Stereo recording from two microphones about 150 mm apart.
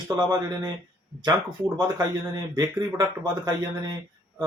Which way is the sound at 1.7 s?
25° right (ahead or behind).